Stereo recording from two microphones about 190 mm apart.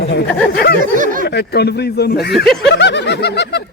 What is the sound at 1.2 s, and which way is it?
Speech, 60° left (ahead or behind).